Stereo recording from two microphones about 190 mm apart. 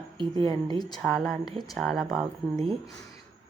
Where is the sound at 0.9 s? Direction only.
Centre (ahead or behind).